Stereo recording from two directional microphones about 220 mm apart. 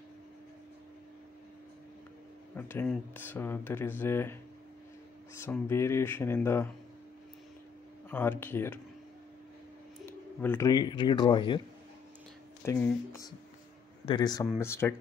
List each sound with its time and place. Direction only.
2.5 s speech: 10° left (ahead or behind)
8.1 s speech: 10° left (ahead or behind)
10.4 s speech: 10° left (ahead or behind)
12.6 s speech: 15° left (ahead or behind)